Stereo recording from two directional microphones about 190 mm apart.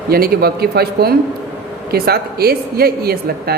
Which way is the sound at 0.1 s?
55° right (ahead or behind).